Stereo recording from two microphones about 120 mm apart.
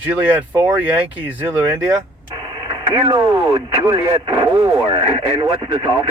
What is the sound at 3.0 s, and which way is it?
Speech, 40° right (ahead or behind).